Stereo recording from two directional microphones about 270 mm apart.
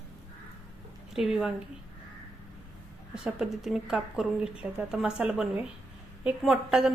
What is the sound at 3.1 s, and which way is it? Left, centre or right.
Speech, centre.